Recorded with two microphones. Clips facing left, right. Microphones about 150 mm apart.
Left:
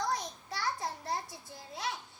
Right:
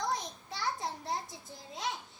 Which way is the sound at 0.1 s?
20° right (ahead or behind).